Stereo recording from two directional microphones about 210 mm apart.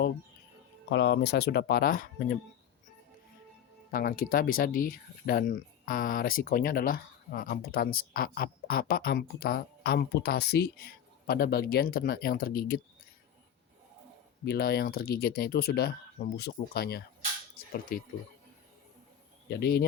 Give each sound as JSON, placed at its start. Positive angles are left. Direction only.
{"t": 0.9, "sound": "speech", "side_deg": 55}
{"t": 3.9, "sound": "speech", "side_deg": 40}
{"t": 14.4, "sound": "speech", "side_deg": 50}
{"t": 19.5, "sound": "speech", "side_deg": 50}